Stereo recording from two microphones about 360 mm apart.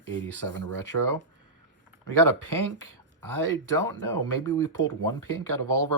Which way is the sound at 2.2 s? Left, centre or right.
Right.